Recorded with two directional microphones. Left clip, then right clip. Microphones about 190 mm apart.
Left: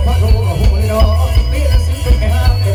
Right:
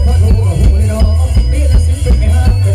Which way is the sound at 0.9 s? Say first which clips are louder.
Left 7 dB; 35° right (ahead or behind).